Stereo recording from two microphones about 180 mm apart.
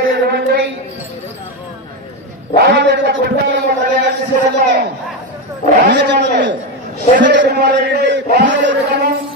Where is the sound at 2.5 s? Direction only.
60° right (ahead or behind).